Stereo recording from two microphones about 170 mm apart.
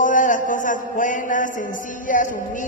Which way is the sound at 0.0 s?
50° left (ahead or behind).